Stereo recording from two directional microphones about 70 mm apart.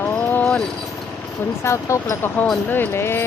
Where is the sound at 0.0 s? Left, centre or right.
Left.